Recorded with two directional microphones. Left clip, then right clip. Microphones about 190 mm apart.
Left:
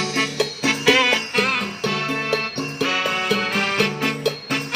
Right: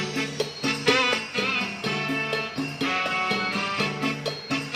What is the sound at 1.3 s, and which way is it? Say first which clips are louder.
Music: left 5 dB; 50° left (ahead or behind).